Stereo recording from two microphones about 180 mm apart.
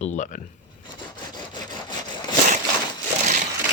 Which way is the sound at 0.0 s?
40° left (ahead or behind).